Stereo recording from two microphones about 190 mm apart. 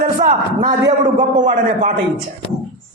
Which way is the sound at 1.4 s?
40° right (ahead or behind).